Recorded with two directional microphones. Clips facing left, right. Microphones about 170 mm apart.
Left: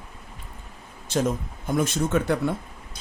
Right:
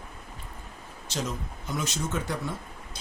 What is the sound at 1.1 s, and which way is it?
Speech, 50° left (ahead or behind).